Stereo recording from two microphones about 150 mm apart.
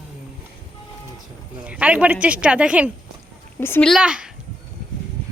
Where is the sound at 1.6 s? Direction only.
10° right (ahead or behind).